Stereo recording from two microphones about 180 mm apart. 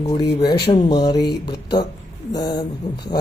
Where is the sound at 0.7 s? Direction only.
25° left (ahead or behind).